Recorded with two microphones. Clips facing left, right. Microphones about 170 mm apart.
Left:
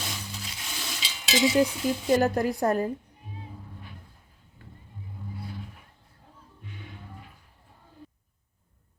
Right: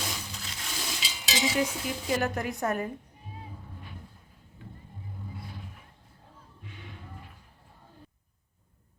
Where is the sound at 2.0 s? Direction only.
40° left (ahead or behind).